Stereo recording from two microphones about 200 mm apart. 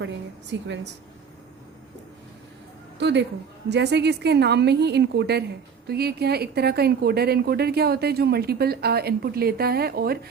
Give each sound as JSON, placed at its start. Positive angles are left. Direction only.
{"t": 3.0, "sound": "a woman's voice", "side_deg": -60}